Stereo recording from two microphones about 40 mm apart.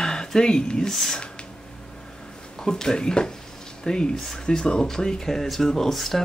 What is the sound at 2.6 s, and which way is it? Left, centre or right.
Speech, centre.